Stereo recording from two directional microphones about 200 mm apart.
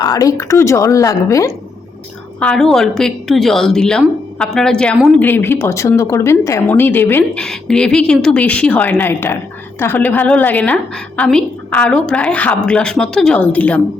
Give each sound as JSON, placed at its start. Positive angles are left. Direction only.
{"t": 0.0, "sound": "speech", "side_deg": 20}
{"t": 2.4, "sound": "a woman's voice", "side_deg": 5}